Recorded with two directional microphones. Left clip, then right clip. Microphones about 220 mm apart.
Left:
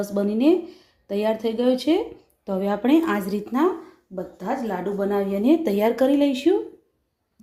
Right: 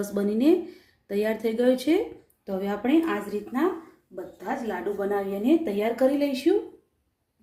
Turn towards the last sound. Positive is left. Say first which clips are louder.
# left 3 dB
turn(degrees=25)  # may be behind; listen again after turning